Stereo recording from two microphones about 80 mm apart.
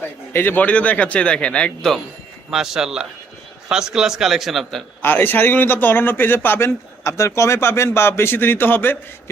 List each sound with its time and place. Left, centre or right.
0.3 s speech: left; by 2.0 s centre
2.5 s speech: centre
5.0 s speech: left